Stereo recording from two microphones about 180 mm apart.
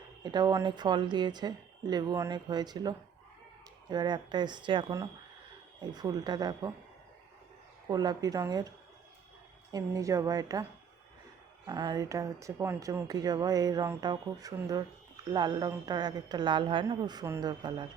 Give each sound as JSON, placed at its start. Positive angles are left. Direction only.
{"t": 0.2, "sound": "speech", "side_deg": -20}
{"t": 7.9, "sound": "speech", "side_deg": -20}
{"t": 9.7, "sound": "speech", "side_deg": -20}